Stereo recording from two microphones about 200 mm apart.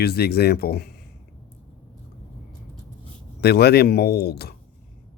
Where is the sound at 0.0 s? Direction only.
50° left (ahead or behind).